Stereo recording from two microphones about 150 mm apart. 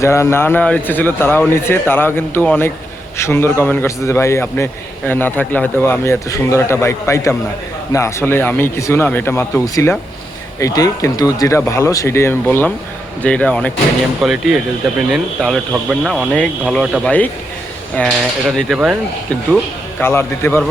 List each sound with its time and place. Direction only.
0.0 s a man's voice: 20° left (ahead or behind)
14.2 s a man's voice: centre (ahead or behind)
20.0 s a man's voice: 15° left (ahead or behind)